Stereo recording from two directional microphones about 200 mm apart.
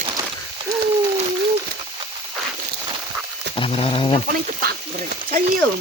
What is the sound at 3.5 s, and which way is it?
Speech, 30° left (ahead or behind).